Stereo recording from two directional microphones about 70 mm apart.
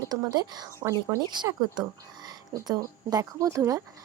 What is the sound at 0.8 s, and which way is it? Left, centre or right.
Speech, right.